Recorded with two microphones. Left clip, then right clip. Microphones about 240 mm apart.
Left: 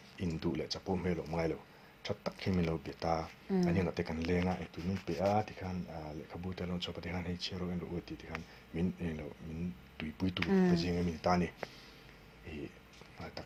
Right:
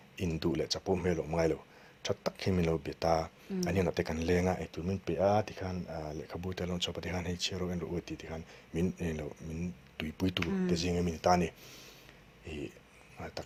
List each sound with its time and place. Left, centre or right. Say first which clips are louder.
0.2 s speech: right 4 dB; right
13.1 s speech: right 4 dB; right